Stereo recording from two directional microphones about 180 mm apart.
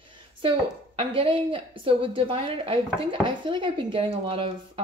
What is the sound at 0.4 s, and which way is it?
A woman's voice, 30° right (ahead or behind).